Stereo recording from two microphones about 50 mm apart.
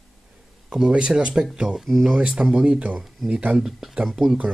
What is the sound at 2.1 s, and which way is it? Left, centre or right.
Speech, centre.